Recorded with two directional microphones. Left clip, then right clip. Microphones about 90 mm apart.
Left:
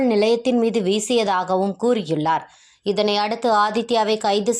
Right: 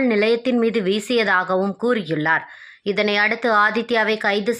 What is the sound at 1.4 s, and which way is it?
Speech, 35° right (ahead or behind).